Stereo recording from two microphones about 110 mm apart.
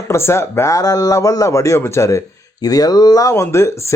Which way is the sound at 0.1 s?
25° left (ahead or behind).